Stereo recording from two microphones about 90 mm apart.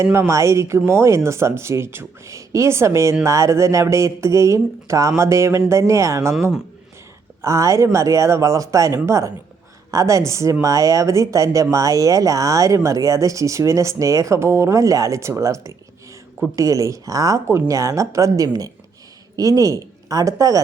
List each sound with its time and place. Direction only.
0.0 s speech: 30° right (ahead or behind)
7.4 s speech: 35° right (ahead or behind)